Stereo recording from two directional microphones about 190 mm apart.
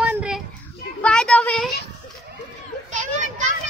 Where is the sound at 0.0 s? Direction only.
5° right (ahead or behind).